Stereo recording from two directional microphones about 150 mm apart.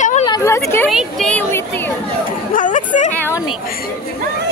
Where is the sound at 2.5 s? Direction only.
60° left (ahead or behind).